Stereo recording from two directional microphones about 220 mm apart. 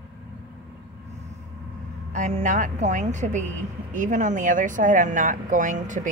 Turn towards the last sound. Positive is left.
turn(degrees=-35)  # may be behind; listen again after turning